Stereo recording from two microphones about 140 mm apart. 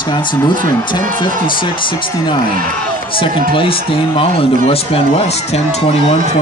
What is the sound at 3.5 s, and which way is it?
Speech, 40° left (ahead or behind).